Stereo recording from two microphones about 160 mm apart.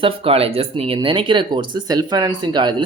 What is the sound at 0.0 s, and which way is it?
Speech, 35° right (ahead or behind).